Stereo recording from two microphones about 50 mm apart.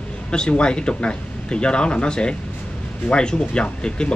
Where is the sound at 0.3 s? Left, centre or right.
Centre.